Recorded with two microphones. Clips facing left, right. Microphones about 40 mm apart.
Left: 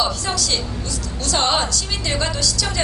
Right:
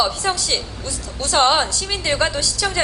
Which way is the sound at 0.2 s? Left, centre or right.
Right.